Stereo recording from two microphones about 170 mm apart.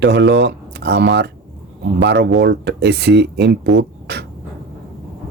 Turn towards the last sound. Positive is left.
turn(degrees=-75)  # may be behind; listen again after turning